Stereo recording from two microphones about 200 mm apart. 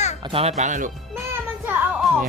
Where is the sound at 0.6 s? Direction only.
40° right (ahead or behind).